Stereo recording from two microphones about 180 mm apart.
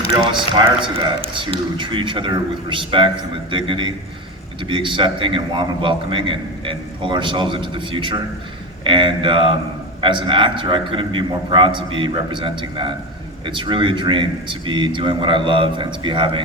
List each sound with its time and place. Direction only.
0.3 s a man's voice: 30° right (ahead or behind)